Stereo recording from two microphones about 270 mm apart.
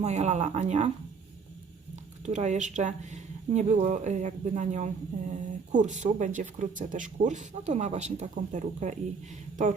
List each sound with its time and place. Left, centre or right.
0.0 s speech: right
2.2 s speech: right